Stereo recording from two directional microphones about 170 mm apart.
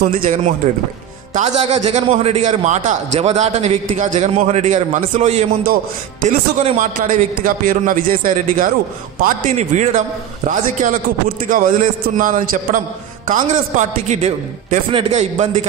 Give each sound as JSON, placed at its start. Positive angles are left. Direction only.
{"t": 0.2, "sound": "a man's voice", "side_deg": -50}
{"t": 1.7, "sound": "a man's voice", "side_deg": -40}
{"t": 9.2, "sound": "a man's voice", "side_deg": -40}